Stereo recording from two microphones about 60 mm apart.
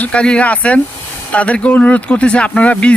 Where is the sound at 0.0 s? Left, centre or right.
Centre.